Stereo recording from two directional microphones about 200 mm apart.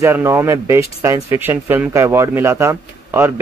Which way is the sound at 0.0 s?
15° right (ahead or behind).